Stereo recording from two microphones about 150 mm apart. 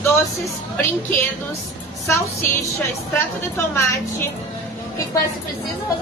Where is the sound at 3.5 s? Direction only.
20° left (ahead or behind).